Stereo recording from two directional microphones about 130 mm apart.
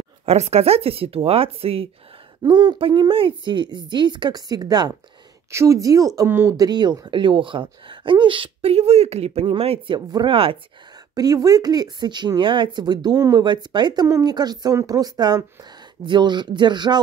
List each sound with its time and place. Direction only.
0.2 s speech: 55° right (ahead or behind)
2.4 s speech: 35° right (ahead or behind); by 6.5 s 15° right (ahead or behind)
6.5 s speech: 30° right (ahead or behind)
9.9 s speech: 30° right (ahead or behind)
10.3 s speech: 45° right (ahead or behind)
11.1 s speech: 30° right (ahead or behind)